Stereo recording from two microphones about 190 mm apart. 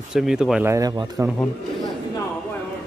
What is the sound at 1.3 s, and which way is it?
Speech, 10° left (ahead or behind).